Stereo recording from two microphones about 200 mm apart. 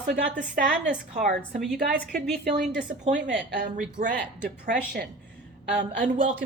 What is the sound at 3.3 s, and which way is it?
Speech, 50° right (ahead or behind).